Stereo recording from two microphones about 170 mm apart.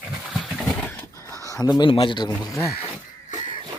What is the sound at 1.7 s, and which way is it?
Speech, 30° left (ahead or behind).